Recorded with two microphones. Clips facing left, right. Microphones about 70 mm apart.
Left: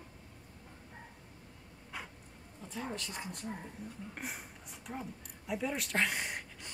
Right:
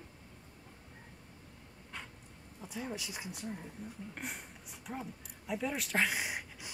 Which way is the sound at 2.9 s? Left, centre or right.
Centre.